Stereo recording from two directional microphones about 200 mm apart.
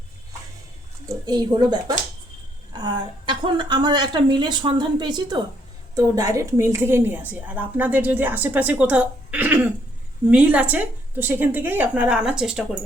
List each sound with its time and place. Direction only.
1.0 s a woman's voice: 20° right (ahead or behind); by 12.6 s 5° right (ahead or behind)